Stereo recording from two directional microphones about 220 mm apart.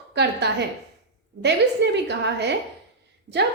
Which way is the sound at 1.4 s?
50° right (ahead or behind).